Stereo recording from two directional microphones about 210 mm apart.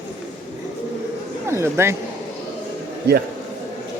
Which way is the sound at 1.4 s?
10° right (ahead or behind).